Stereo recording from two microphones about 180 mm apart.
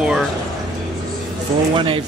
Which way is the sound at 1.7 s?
30° right (ahead or behind).